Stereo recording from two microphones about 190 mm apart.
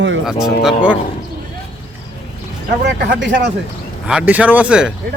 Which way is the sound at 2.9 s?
70° right (ahead or behind).